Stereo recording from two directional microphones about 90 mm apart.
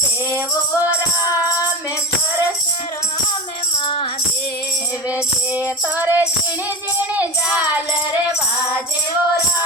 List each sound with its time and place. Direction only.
5.5 s music: 20° right (ahead or behind)
7.2 s child singing: 15° right (ahead or behind)